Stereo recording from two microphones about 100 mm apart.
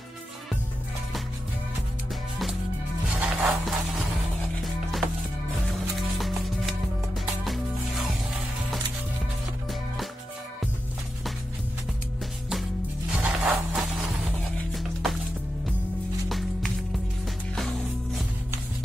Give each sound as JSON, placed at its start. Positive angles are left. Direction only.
{"t": 3.1, "sound": "music", "side_deg": -15}
{"t": 3.4, "sound": "a sound", "side_deg": 0}
{"t": 5.9, "sound": "music", "side_deg": 0}
{"t": 13.1, "sound": "music", "side_deg": -15}
{"t": 13.7, "sound": "music", "side_deg": 0}
{"t": 16.3, "sound": "music", "side_deg": 0}